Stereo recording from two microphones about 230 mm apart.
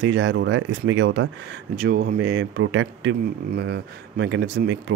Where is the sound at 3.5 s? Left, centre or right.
Right.